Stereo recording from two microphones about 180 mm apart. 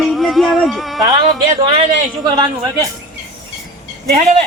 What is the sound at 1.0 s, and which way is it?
A man's voice, 20° right (ahead or behind).